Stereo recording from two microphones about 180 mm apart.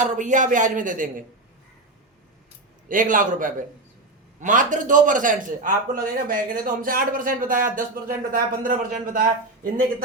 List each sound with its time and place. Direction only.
0.0 s a man's voice: 45° right (ahead or behind)
2.9 s a man's voice: 50° right (ahead or behind)